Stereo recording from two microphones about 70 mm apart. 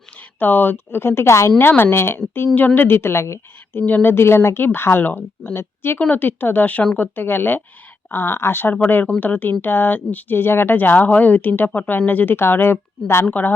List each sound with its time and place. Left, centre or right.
0.2 s a woman's voice: left
3.8 s a woman's voice: left
6.0 s a woman's voice: left